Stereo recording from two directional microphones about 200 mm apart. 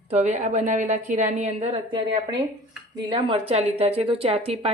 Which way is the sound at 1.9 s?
20° right (ahead or behind).